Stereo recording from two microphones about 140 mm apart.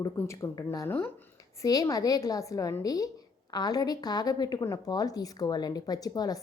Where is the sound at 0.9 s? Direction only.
15° left (ahead or behind).